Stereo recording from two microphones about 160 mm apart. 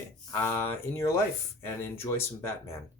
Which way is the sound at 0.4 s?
15° left (ahead or behind).